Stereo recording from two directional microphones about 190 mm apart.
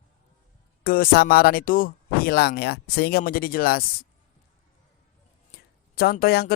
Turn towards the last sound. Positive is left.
turn(degrees=55)  # may be behind; listen again after turning